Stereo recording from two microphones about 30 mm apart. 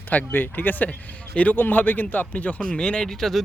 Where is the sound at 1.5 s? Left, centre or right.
Left.